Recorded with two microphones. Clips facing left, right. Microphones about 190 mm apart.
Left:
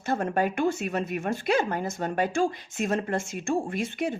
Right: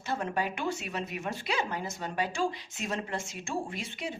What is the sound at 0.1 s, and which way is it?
Speech, 50° left (ahead or behind).